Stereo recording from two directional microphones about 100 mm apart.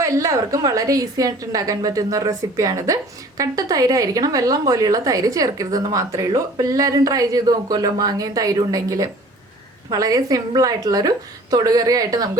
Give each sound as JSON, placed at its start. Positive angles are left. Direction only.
{"t": 0.0, "sound": "a woman's voice", "side_deg": -30}